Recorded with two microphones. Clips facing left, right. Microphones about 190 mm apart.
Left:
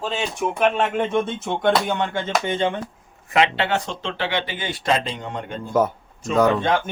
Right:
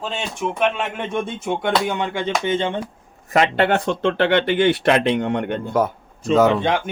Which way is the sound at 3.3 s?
45° right (ahead or behind).